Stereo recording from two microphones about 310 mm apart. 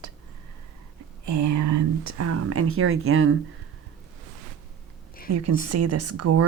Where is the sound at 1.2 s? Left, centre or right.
Right.